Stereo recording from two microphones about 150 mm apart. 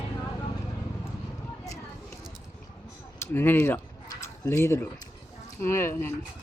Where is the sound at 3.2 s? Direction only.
15° left (ahead or behind).